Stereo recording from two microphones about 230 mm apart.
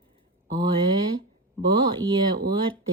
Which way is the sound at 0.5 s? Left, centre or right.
Centre.